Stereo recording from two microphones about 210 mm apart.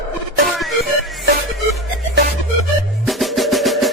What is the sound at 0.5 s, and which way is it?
Music, centre (ahead or behind).